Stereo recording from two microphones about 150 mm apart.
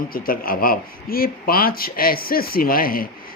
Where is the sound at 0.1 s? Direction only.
75° left (ahead or behind).